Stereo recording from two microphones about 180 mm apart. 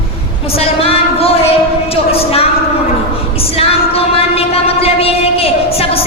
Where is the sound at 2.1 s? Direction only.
35° left (ahead or behind).